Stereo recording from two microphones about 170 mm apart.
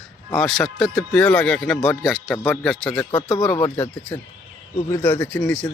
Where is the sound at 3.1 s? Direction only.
30° left (ahead or behind).